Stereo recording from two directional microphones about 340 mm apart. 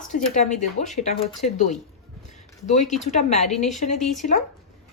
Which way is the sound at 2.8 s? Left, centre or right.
Centre.